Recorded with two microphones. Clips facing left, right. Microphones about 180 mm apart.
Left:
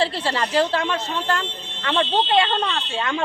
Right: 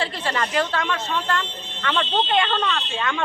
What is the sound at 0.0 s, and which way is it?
A man's voice, 30° left (ahead or behind).